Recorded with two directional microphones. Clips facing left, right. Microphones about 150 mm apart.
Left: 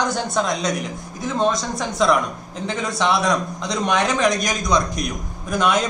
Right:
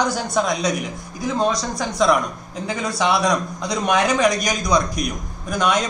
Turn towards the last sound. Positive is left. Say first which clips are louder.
# left 1 dB
turn(degrees=0)  # may be behind; listen again after turning